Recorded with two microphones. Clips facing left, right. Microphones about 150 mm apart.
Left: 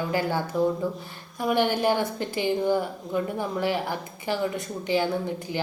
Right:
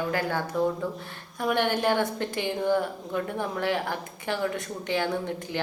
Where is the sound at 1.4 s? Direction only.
5° left (ahead or behind).